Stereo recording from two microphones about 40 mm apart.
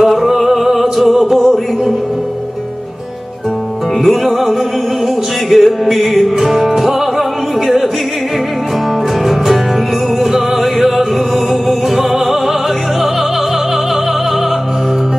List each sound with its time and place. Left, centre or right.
0.0 s music: centre
4.0 s music: centre
10.2 s music: centre